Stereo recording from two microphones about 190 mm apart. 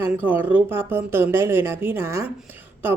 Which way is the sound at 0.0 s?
10° right (ahead or behind).